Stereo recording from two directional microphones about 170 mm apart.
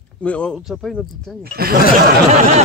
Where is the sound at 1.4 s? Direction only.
65° right (ahead or behind).